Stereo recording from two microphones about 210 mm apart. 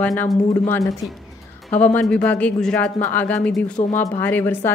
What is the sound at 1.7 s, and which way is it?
A woman's voice, 5° left (ahead or behind).